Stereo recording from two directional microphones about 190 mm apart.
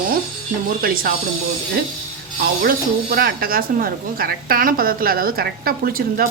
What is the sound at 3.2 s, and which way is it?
A woman's voice, 50° right (ahead or behind).